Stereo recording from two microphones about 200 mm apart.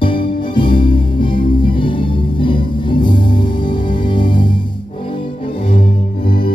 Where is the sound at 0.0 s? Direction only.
25° left (ahead or behind).